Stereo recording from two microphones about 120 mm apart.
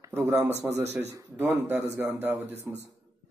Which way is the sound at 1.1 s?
20° right (ahead or behind).